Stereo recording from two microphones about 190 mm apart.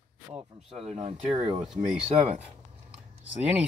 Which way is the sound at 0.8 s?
35° right (ahead or behind).